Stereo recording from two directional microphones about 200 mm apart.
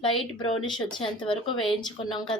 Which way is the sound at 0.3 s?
20° left (ahead or behind).